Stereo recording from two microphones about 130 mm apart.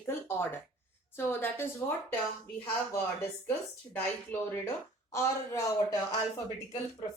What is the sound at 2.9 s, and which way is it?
Speech, 15° left (ahead or behind).